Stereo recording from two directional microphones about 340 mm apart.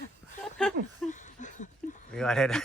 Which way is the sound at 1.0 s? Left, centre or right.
Left.